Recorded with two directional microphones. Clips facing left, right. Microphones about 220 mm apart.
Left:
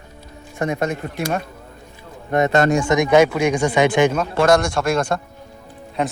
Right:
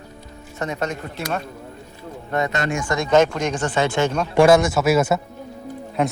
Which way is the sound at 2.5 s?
45° left (ahead or behind).